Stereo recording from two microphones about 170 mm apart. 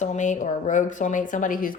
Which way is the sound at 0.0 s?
45° left (ahead or behind).